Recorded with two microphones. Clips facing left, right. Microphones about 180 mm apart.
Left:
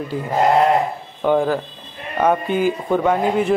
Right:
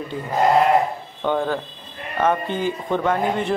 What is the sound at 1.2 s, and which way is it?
A man's voice, 10° left (ahead or behind).